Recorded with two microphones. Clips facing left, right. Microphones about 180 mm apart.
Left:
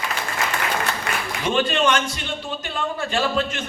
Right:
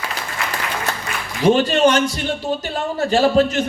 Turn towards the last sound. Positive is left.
turn(degrees=-40)  # may be behind; listen again after turning